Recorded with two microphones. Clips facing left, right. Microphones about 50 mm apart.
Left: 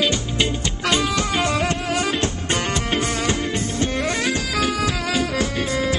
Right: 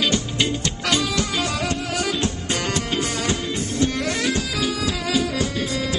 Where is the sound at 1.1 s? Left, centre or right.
Left.